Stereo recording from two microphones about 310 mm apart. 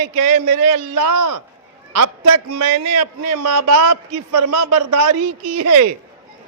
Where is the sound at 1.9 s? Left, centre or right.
Right.